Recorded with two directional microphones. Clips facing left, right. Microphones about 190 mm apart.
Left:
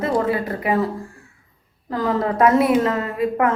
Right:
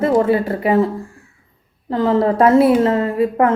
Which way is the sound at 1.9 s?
30° right (ahead or behind).